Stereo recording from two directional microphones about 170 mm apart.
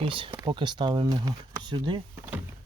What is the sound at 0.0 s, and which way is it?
Speech, 30° right (ahead or behind).